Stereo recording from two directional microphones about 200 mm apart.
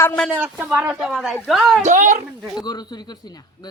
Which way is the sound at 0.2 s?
5° right (ahead or behind).